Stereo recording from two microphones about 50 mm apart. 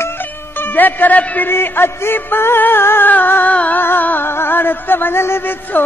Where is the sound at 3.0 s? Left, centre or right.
Left.